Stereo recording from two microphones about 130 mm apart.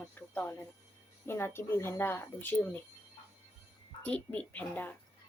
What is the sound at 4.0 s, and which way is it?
Speech, 10° left (ahead or behind).